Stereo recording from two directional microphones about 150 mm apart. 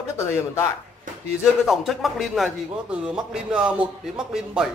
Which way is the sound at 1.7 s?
Centre (ahead or behind).